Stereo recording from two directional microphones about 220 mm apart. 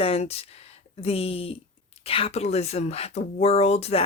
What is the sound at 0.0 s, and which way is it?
Speech, 25° left (ahead or behind).